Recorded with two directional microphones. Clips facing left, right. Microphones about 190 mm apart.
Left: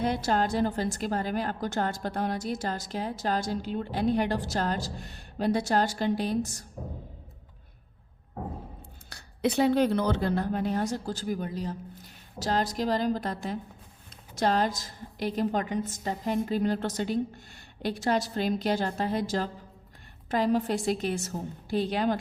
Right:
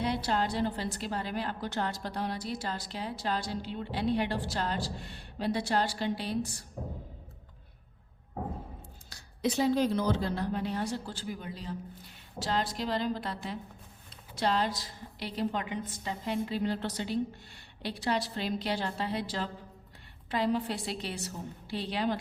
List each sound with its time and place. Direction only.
0.0 s a woman's voice: 50° left (ahead or behind)
9.0 s a woman's voice: 60° left (ahead or behind)